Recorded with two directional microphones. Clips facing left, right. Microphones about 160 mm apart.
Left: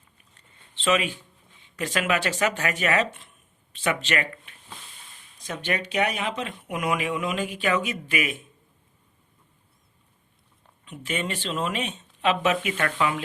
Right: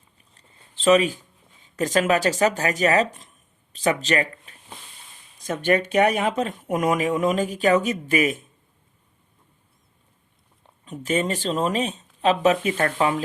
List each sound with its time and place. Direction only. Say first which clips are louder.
0.3 s a sound: even; 35° right (ahead or behind)
1.6 s speech: right 6 dB; 40° right (ahead or behind)
10.8 s speech: right 6 dB; 40° right (ahead or behind)